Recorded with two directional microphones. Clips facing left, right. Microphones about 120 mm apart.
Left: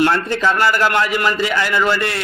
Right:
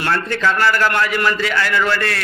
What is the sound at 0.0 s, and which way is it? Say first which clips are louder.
A man's voice: left 3 dB; 25° left (ahead or behind).